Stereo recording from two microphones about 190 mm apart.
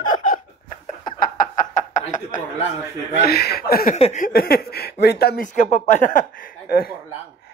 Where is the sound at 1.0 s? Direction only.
45° left (ahead or behind).